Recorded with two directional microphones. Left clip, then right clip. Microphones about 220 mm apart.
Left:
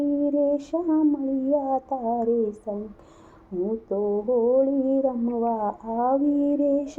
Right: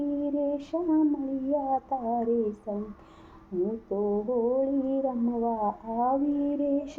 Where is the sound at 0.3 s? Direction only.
25° left (ahead or behind).